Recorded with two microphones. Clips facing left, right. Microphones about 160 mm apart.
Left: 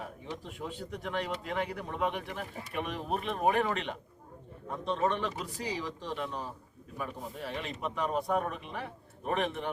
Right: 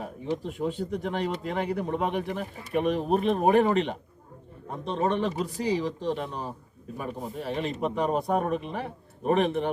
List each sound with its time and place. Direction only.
0.6 s speech: 30° right (ahead or behind)